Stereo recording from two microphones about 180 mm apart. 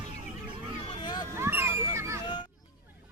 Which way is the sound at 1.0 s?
25° left (ahead or behind).